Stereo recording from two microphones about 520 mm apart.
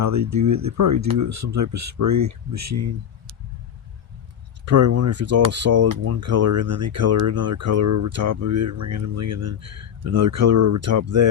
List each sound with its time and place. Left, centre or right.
0.0 s speech: right
4.6 s speech: right